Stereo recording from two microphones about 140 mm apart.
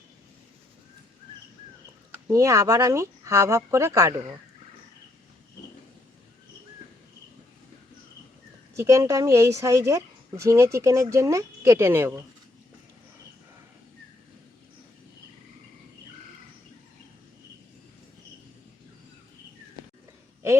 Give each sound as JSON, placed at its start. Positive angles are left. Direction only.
{"t": 2.2, "sound": "a woman's voice", "side_deg": -20}
{"t": 8.7, "sound": "a woman's voice", "side_deg": -20}